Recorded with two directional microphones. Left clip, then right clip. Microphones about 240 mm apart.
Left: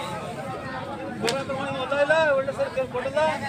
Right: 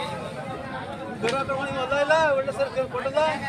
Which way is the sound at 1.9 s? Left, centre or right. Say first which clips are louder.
Even; right.